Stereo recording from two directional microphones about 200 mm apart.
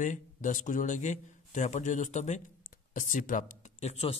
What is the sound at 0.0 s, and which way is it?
A man's voice, 40° left (ahead or behind).